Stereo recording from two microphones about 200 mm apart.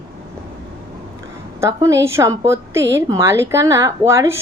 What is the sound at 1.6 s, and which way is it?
Speech, 15° right (ahead or behind).